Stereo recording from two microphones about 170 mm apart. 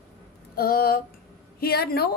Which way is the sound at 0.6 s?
60° left (ahead or behind).